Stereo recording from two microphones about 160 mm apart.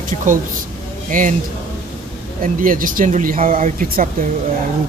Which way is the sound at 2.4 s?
60° right (ahead or behind).